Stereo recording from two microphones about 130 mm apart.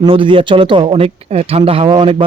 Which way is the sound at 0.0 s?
40° right (ahead or behind).